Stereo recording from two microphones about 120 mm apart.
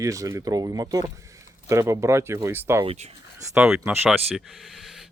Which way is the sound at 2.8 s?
55° right (ahead or behind).